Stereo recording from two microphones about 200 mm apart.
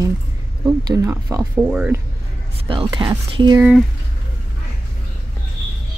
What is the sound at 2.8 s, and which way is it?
Speech, 20° right (ahead or behind).